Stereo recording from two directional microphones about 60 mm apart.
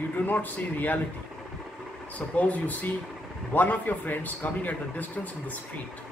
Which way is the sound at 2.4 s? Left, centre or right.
Left.